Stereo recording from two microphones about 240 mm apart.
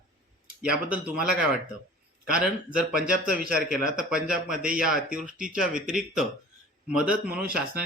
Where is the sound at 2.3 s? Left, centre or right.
Centre.